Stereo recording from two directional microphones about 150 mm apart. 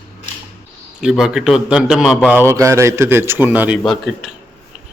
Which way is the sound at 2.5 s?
20° right (ahead or behind).